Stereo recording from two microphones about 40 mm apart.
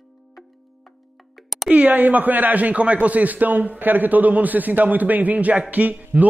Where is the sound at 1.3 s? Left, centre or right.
Centre.